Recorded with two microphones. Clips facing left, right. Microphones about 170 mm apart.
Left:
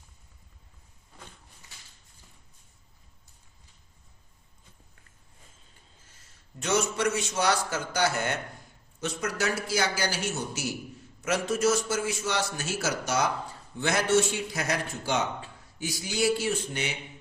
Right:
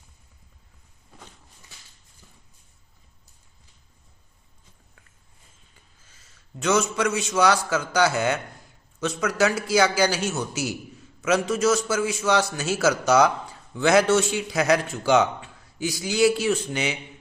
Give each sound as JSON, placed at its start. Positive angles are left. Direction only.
{"t": 6.6, "sound": "a man's voice", "side_deg": -90}